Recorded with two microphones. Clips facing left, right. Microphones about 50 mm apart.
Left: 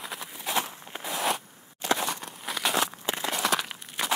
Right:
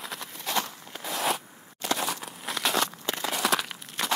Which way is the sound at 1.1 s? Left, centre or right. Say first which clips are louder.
Even; centre.